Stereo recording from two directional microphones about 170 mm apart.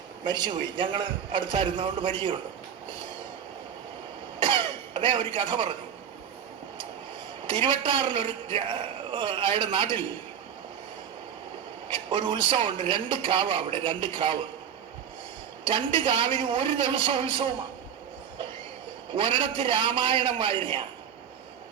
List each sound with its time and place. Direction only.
0.3 s a man's voice: 25° right (ahead or behind)
4.4 s cough: 30° right (ahead or behind)
7.4 s a man's voice: 30° right (ahead or behind)
11.9 s a man's voice: 30° right (ahead or behind)
15.6 s a man's voice: 30° right (ahead or behind)
19.1 s a man's voice: 30° right (ahead or behind)